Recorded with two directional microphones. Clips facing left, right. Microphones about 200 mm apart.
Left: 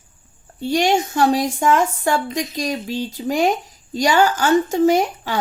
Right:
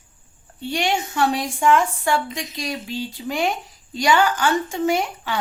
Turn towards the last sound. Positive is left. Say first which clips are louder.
# left 5 dB
turn(degrees=40)  # may be behind; listen again after turning